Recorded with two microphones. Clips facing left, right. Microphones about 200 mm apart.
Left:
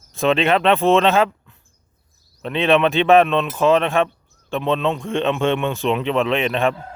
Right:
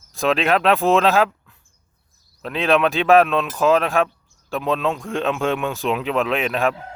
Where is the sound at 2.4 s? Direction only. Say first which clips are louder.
Left 2 dB; centre (ahead or behind).